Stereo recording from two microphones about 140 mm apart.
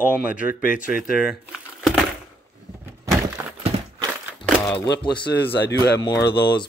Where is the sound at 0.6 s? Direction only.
75° left (ahead or behind).